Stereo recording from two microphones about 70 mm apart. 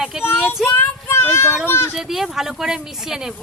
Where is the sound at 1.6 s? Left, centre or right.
Left.